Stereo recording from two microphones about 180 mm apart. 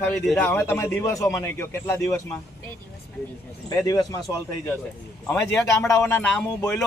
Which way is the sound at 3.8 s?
20° left (ahead or behind).